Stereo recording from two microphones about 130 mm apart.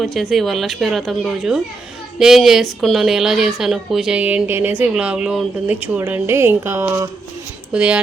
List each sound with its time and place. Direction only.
0.0 s a woman's voice: centre (ahead or behind); by 7.1 s 20° right (ahead or behind)
7.7 s speech: 10° right (ahead or behind)